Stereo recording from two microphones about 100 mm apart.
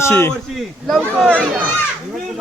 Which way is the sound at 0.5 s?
Centre (ahead or behind).